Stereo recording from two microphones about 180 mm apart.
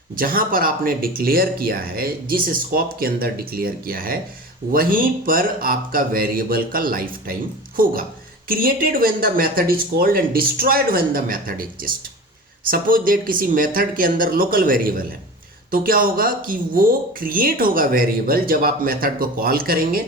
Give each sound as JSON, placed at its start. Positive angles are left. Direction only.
{"t": 0.2, "sound": "speech", "side_deg": -50}
{"t": 8.4, "sound": "speech", "side_deg": -55}